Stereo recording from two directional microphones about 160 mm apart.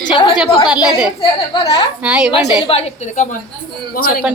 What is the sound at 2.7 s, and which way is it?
Speech, 40° left (ahead or behind).